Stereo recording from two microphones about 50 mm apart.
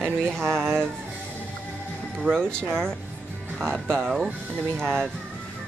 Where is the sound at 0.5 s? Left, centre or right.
Centre.